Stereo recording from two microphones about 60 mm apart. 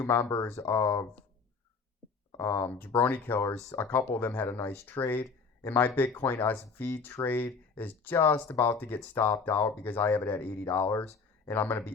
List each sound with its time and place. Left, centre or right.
0.0 s speech: left
2.4 s speech: left
9.1 s speech: left
9.4 s speech: left